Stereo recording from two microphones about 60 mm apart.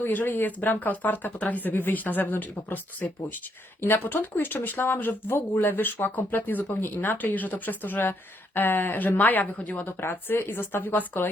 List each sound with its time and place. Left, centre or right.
0.0 s speech: left
9.8 s speech: left